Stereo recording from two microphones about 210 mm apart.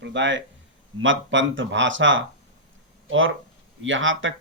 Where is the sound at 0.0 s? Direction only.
60° right (ahead or behind).